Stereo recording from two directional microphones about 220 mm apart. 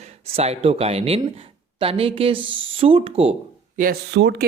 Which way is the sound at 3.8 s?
45° right (ahead or behind).